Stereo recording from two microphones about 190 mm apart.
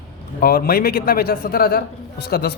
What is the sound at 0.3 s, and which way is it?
A man's voice, 50° left (ahead or behind).